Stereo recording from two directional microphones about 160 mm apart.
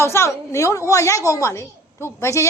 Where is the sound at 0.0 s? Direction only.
15° left (ahead or behind).